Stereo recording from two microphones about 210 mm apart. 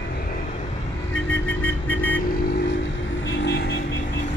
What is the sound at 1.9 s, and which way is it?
Vehicle, 10° left (ahead or behind).